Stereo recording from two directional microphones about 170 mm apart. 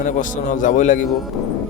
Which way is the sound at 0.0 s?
50° left (ahead or behind).